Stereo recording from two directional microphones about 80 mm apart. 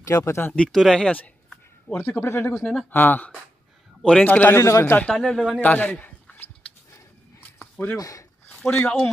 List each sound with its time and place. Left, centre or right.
0.0 s speech: left
0.7 s speech: centre; by 2.6 s left
2.6 s speech: centre
2.9 s a man's voice: left
4.6 s speech: left
5.1 s a man's voice: centre
5.6 s a man's voice: left
6.9 s a sound: left
7.7 s speech: centre
8.0 s speech: left
8.6 s speech: centre